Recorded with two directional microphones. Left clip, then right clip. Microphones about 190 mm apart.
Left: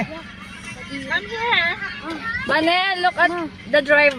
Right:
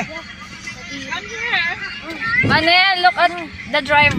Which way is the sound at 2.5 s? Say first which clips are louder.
Right 3 dB; 15° left (ahead or behind).